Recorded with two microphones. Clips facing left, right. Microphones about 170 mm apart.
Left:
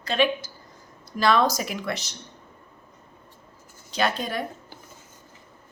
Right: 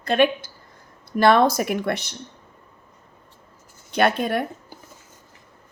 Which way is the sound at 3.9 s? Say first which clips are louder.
Right 6 dB; 60° right (ahead or behind).